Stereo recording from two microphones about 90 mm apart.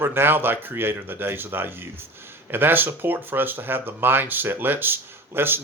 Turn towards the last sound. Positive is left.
turn(degrees=-25)  # may be behind; listen again after turning